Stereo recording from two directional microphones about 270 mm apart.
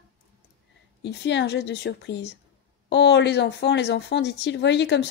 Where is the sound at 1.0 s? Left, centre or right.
Left.